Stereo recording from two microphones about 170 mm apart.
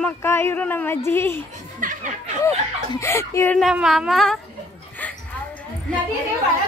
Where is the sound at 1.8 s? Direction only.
50° right (ahead or behind).